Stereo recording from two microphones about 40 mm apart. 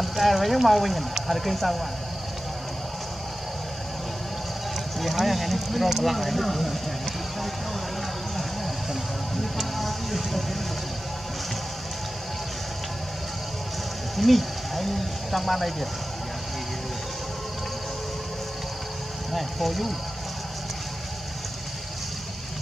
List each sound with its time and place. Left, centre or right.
0.0 s speech: centre
5.0 s speech: centre
9.4 s a sound: centre
14.1 s speech: centre
19.3 s speech: centre